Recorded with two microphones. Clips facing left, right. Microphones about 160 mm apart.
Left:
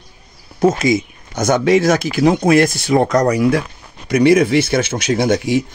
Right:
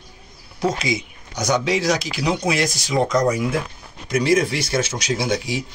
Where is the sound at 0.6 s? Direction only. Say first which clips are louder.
Left 8 dB; 50° left (ahead or behind).